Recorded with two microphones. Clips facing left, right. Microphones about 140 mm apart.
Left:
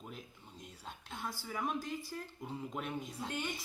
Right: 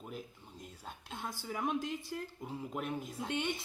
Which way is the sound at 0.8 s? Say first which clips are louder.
Even; 20° right (ahead or behind).